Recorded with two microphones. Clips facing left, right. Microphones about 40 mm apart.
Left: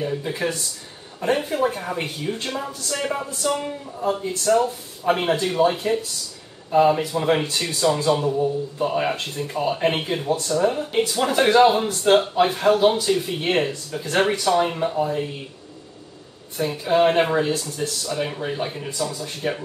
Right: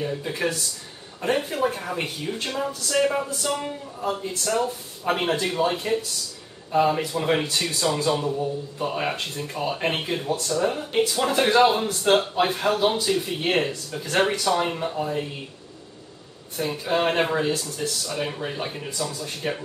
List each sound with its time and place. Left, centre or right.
0.0 s speech: centre
16.5 s speech: centre